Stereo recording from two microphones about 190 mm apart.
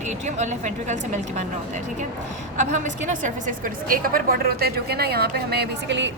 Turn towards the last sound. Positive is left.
turn(degrees=-60)  # may be behind; listen again after turning